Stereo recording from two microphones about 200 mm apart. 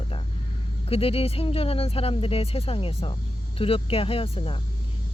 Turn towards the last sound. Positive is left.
turn(degrees=30)  # may be behind; listen again after turning